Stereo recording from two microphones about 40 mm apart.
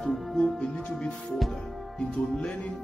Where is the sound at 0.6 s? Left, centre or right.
Left.